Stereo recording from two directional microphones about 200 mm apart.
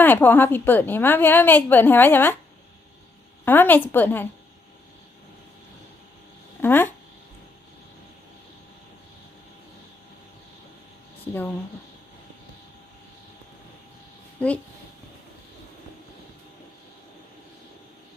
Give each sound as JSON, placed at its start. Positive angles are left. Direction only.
{"t": 0.0, "sound": "a woman's voice", "side_deg": 10}
{"t": 3.4, "sound": "a woman's voice", "side_deg": 10}
{"t": 6.6, "sound": "speech", "side_deg": 10}
{"t": 14.3, "sound": "speech", "side_deg": 5}